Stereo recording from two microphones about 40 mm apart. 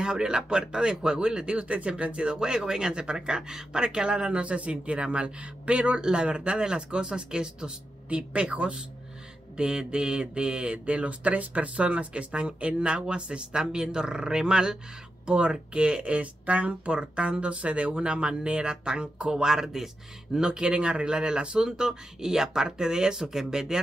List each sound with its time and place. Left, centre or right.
0.0 s speech: centre
20.3 s speech: right